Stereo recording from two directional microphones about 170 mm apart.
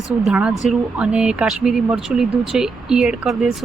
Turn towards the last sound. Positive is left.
turn(degrees=-5)  # may be behind; listen again after turning